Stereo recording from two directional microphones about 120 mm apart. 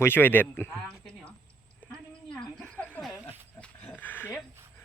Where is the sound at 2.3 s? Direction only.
10° left (ahead or behind).